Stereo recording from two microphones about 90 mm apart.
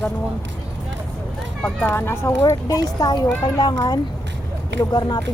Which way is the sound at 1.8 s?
25° left (ahead or behind).